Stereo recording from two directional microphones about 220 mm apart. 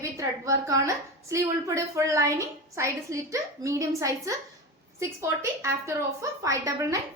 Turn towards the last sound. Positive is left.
turn(degrees=-15)  # may be behind; listen again after turning